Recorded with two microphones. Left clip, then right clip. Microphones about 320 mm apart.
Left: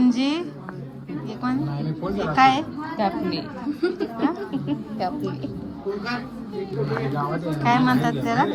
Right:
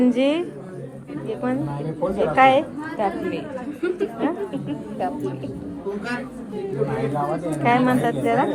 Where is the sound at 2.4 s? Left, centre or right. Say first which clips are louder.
Right 2 dB; centre.